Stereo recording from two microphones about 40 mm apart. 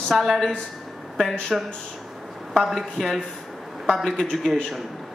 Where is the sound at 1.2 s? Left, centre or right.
Left.